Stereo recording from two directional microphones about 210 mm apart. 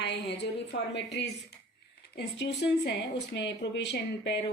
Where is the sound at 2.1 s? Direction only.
55° left (ahead or behind).